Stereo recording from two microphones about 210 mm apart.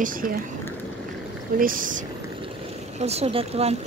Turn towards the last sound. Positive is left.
turn(degrees=-30)  # may be behind; listen again after turning